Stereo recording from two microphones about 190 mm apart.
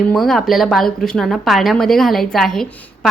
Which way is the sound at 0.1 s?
Centre (ahead or behind).